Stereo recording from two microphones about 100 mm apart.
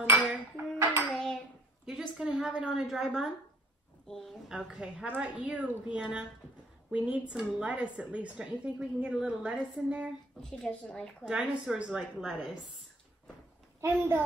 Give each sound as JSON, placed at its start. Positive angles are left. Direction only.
{"t": 0.0, "sound": "dishes", "side_deg": -20}
{"t": 1.1, "sound": "hands", "side_deg": 5}
{"t": 1.9, "sound": "a woman's voice", "side_deg": -5}
{"t": 10.4, "sound": "a woman's voice", "side_deg": 10}
{"t": 11.2, "sound": "a woman's voice", "side_deg": -10}